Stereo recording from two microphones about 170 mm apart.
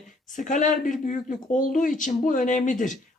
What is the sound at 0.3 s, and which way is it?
Speech, 50° left (ahead or behind).